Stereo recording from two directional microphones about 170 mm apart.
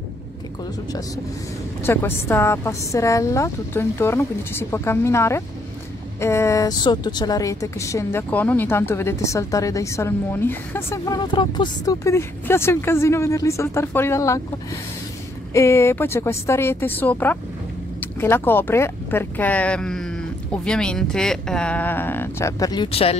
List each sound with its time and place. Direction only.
1.8 s speech: 15° left (ahead or behind)
11.1 s speech: 25° left (ahead or behind)
15.5 s speech: 15° left (ahead or behind); by 23.1 s 35° left (ahead or behind)